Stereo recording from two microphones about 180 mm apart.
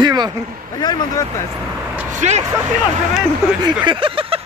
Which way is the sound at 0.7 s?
20° left (ahead or behind).